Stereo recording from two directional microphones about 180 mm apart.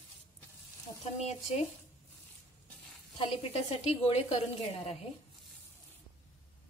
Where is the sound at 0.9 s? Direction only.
25° left (ahead or behind).